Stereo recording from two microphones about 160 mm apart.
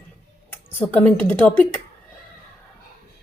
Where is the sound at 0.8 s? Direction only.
10° left (ahead or behind).